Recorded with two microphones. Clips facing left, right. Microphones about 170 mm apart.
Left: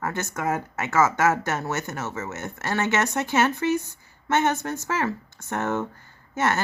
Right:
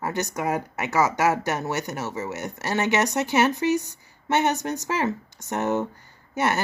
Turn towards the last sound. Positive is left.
turn(degrees=-15)  # may be behind; listen again after turning